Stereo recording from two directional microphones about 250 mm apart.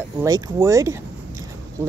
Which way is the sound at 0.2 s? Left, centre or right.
Centre.